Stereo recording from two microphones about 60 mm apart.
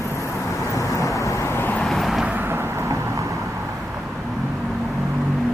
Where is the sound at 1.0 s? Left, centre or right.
Left.